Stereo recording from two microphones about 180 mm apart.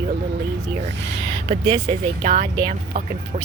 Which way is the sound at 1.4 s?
35° right (ahead or behind).